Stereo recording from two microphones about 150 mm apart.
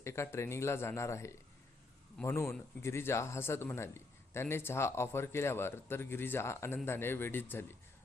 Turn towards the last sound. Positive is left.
turn(degrees=15)  # may be behind; listen again after turning